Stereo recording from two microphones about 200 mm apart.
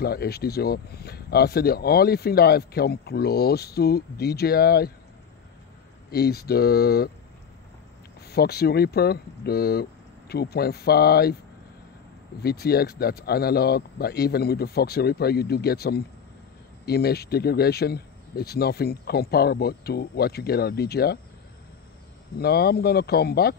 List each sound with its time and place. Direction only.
0.0 s speech: 50° left (ahead or behind)
6.0 s speech: 50° left (ahead or behind)
8.3 s speech: 50° left (ahead or behind)
12.4 s speech: 50° left (ahead or behind)
22.4 s speech: 50° left (ahead or behind)